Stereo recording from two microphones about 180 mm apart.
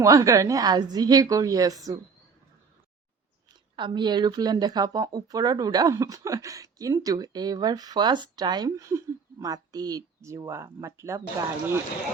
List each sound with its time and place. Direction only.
0.0 s speech: 20° right (ahead or behind)
3.5 s speech: 25° right (ahead or behind)